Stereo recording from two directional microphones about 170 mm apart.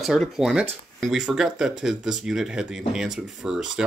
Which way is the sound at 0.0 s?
Centre (ahead or behind).